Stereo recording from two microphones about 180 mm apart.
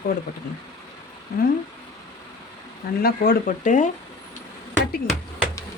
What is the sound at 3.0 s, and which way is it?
Speech, 55° left (ahead or behind).